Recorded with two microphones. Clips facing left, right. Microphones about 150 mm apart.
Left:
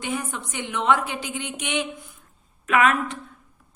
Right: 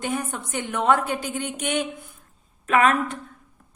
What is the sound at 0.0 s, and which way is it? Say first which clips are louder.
A woman's voice: right 1 dB; 45° right (ahead or behind).